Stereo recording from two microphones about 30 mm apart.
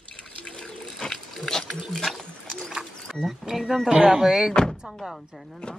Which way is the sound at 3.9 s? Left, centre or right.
Right.